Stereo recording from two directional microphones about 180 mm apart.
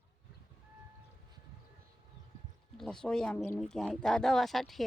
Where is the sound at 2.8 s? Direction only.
5° left (ahead or behind).